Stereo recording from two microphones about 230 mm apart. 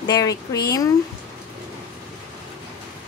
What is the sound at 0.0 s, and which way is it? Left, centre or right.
Speech, centre.